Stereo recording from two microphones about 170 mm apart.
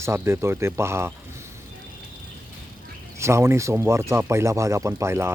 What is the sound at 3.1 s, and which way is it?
Speech, 15° right (ahead or behind).